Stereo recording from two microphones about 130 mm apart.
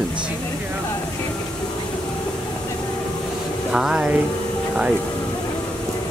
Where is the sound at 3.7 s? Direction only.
5° right (ahead or behind).